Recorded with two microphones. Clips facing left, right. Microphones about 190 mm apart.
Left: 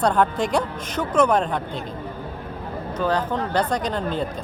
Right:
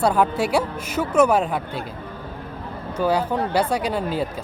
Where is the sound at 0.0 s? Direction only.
5° right (ahead or behind).